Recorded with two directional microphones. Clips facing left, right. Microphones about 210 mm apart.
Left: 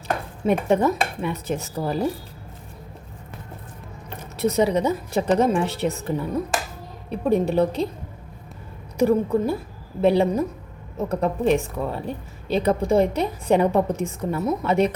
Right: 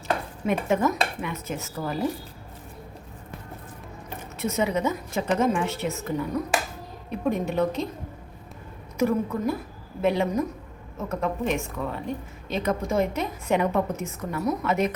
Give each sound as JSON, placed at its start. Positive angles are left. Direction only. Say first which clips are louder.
{"t": 0.4, "sound": "a woman's voice", "louder": "left 4 dB", "side_deg": 30}
{"t": 4.4, "sound": "a woman's voice", "louder": "left 6 dB", "side_deg": 35}
{"t": 7.3, "sound": "a woman's voice", "louder": "left 5 dB", "side_deg": 35}
{"t": 9.0, "sound": "a woman's voice", "louder": "left 5 dB", "side_deg": 30}